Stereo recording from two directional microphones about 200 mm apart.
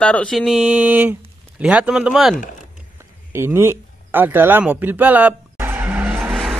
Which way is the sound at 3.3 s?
10° right (ahead or behind).